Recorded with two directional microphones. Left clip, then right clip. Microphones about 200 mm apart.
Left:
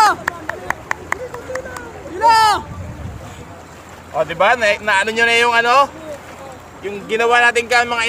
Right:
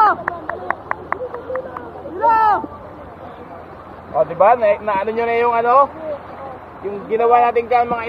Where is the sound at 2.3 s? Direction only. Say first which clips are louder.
Left 1 dB; 45° left (ahead or behind).